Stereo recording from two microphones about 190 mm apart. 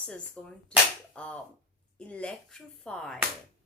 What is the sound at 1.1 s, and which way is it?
Slap, 5° left (ahead or behind).